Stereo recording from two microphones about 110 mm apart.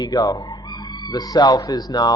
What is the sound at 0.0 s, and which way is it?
A man's voice, 35° left (ahead or behind).